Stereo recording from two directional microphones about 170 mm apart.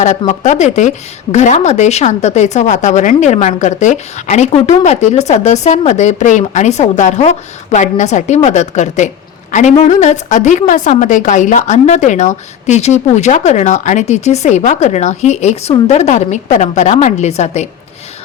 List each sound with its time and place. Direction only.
0.3 s a woman's voice: 45° left (ahead or behind)